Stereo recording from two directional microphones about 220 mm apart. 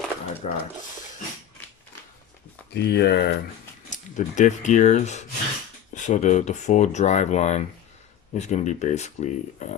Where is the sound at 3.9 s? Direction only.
35° left (ahead or behind).